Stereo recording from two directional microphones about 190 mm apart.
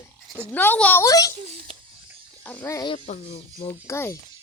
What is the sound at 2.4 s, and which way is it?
Speech, 10° left (ahead or behind).